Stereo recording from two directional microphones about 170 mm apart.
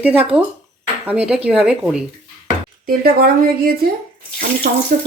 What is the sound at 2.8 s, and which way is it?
A woman's voice, 60° right (ahead or behind).